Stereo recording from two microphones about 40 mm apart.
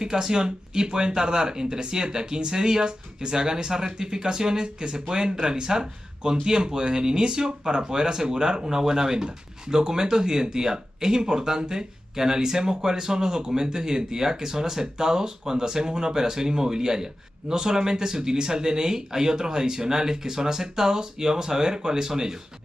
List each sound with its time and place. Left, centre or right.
0.0 s speech: centre